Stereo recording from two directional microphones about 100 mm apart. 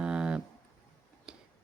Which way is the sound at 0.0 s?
10° right (ahead or behind).